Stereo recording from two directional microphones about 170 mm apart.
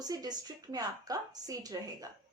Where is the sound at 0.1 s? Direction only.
25° right (ahead or behind).